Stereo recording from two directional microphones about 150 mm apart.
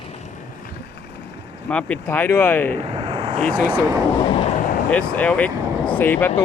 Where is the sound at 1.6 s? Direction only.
10° left (ahead or behind).